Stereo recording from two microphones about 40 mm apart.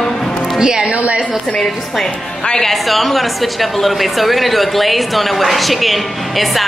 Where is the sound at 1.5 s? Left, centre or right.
Centre.